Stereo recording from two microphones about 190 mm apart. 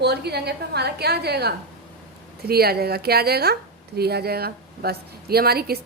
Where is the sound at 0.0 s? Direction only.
60° right (ahead or behind).